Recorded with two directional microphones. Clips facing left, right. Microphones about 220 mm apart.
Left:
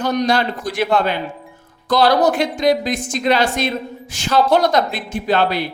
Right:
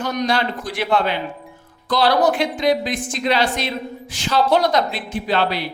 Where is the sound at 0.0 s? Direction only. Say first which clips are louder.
Left 3 dB; 35° left (ahead or behind).